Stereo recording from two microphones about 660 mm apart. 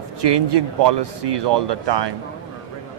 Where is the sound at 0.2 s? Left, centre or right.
Right.